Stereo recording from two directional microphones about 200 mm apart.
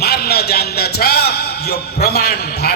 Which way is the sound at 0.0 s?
50° left (ahead or behind).